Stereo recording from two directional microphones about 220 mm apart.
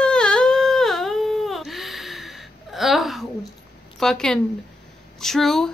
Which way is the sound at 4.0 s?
Centre (ahead or behind).